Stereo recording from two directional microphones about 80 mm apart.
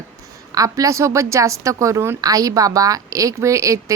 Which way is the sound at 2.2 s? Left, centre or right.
Right.